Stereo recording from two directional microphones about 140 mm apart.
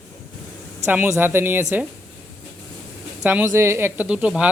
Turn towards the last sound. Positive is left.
turn(degrees=-10)  # may be behind; listen again after turning